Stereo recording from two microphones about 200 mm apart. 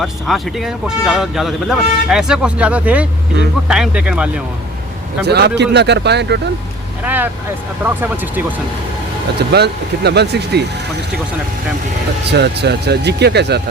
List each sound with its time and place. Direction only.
0.0 s speech: centre (ahead or behind)
5.2 s speech: 55° right (ahead or behind)
7.0 s speech: 10° right (ahead or behind)
9.5 s speech: 55° right (ahead or behind)
12.3 s speech: 55° right (ahead or behind)